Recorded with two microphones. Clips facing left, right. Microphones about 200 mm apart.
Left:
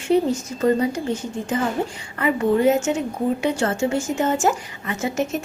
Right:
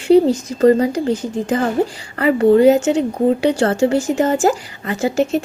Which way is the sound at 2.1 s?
75° right (ahead or behind).